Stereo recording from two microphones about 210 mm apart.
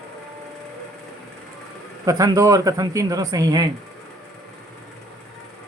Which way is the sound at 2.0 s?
15° right (ahead or behind).